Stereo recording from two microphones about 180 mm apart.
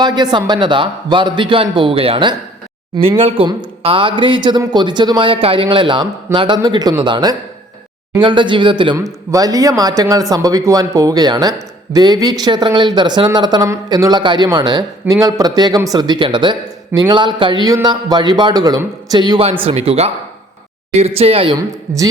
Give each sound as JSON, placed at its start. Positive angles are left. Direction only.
{"t": 0.0, "sound": "speech", "side_deg": -25}
{"t": 21.7, "sound": "speech", "side_deg": -20}